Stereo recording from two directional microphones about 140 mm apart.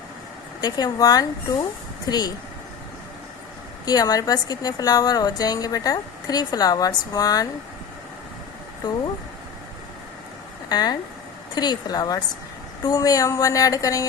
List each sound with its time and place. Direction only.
0.6 s a woman's voice: 30° left (ahead or behind)
3.8 s a woman's voice: 25° left (ahead or behind)
8.8 s a woman's voice: 30° left (ahead or behind)
10.7 s a woman's voice: 30° left (ahead or behind)